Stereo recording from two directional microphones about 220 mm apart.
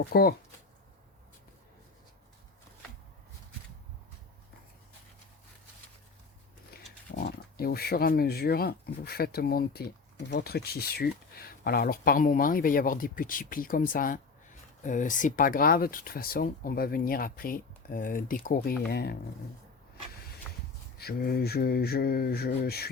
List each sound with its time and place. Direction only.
0.0 s speech: 45° left (ahead or behind)
7.3 s speech: 45° left (ahead or behind)
21.0 s speech: 45° left (ahead or behind)